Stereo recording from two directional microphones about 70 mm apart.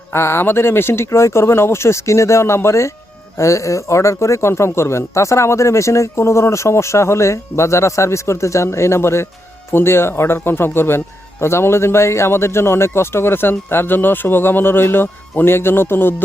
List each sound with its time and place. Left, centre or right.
0.1 s speech: left